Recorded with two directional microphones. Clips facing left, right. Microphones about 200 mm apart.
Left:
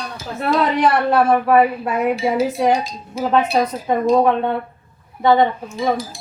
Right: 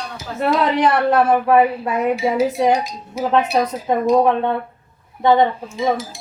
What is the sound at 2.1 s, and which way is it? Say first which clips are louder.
Speech: right 1 dB; 20° right (ahead or behind).